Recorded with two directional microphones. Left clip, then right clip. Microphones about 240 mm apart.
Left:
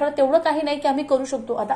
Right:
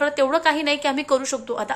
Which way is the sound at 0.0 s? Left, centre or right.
Centre.